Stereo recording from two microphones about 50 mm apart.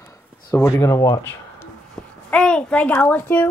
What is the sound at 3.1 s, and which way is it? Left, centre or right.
Speech, left.